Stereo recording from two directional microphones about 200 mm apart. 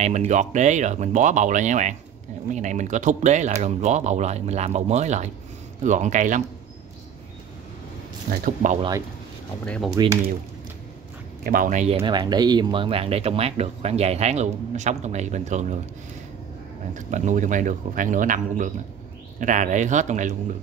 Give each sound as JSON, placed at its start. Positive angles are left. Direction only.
{"t": 0.0, "sound": "speech", "side_deg": -35}
{"t": 8.3, "sound": "speech", "side_deg": -45}
{"t": 10.0, "sound": "speech", "side_deg": -20}
{"t": 11.4, "sound": "speech", "side_deg": -45}
{"t": 16.9, "sound": "speech", "side_deg": -40}